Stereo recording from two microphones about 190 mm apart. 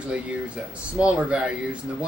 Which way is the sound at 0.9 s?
5° right (ahead or behind).